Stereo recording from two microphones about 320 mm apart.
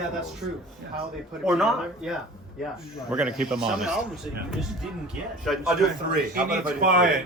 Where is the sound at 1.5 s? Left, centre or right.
Centre.